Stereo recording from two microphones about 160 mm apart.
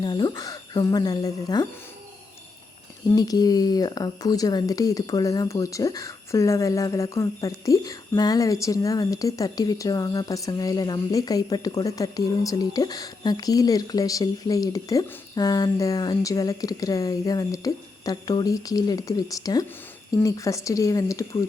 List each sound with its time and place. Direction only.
0.0 s speech: 25° left (ahead or behind)
3.1 s speech: 25° left (ahead or behind)